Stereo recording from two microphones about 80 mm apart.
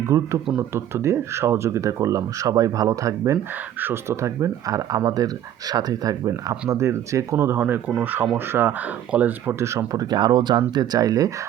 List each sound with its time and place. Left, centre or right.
0.1 s speech: right
0.7 s speech: right
3.8 s speech: right
9.6 s speech: right
10.1 s speech: right
10.8 s speech: right